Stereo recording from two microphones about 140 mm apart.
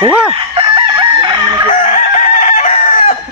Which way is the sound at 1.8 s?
55° left (ahead or behind).